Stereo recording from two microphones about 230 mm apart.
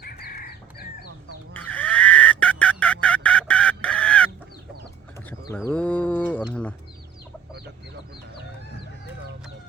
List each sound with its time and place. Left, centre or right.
0.0 s fowl: left
1.5 s fowl: centre
5.5 s bird: centre